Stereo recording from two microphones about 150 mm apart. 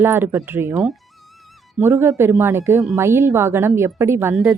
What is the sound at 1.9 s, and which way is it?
A woman's voice, 15° right (ahead or behind).